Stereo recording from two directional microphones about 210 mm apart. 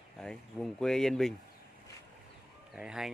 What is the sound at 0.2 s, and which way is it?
Speech, 5° left (ahead or behind).